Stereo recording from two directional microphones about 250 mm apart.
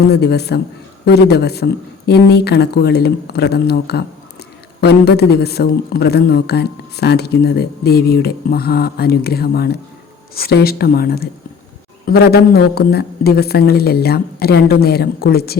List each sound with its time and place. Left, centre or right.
0.1 s a man's voice: left